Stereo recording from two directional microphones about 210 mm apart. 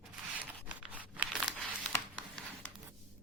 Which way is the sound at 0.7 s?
5° right (ahead or behind).